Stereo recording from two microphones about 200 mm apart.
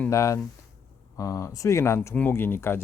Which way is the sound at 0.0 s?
15° left (ahead or behind).